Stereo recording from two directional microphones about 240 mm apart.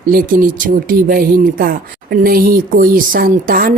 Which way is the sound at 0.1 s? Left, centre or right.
Right.